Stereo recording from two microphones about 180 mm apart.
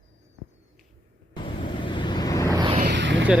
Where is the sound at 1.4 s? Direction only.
25° left (ahead or behind).